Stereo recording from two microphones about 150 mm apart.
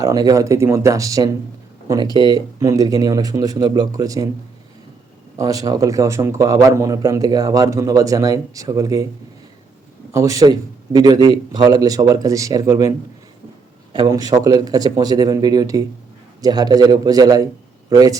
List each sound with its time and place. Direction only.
0.0 s a man's voice: 25° right (ahead or behind)
5.4 s a man's voice: 25° right (ahead or behind)
10.1 s a man's voice: 20° right (ahead or behind)
13.9 s a man's voice: 25° right (ahead or behind)